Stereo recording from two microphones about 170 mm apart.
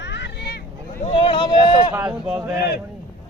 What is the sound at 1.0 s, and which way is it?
Speech, 35° left (ahead or behind).